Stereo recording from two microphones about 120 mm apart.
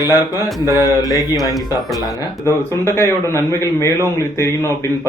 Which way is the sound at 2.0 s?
20° left (ahead or behind).